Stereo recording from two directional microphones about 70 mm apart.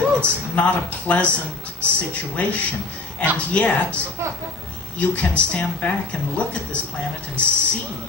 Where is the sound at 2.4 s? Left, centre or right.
Left.